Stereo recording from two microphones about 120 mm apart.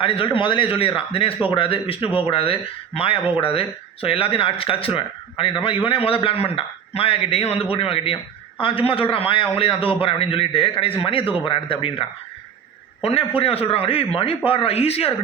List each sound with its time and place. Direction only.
0.0 s speech: 50° left (ahead or behind)